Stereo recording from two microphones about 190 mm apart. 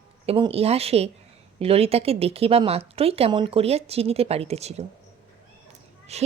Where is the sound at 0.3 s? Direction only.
30° right (ahead or behind).